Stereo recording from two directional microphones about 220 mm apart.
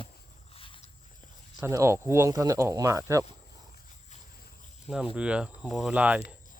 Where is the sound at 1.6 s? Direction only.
15° right (ahead or behind).